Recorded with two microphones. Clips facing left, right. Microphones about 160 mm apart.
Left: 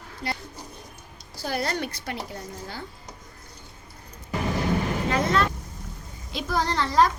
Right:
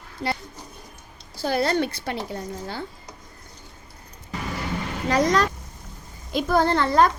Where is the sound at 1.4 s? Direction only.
25° right (ahead or behind).